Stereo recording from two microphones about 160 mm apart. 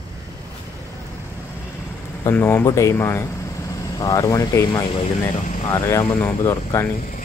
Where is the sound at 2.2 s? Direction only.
15° left (ahead or behind).